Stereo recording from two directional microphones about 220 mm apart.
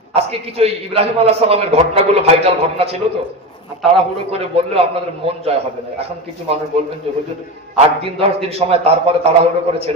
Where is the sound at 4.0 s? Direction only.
25° right (ahead or behind).